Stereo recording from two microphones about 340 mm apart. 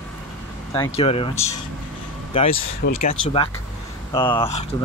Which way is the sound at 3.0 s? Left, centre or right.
Centre.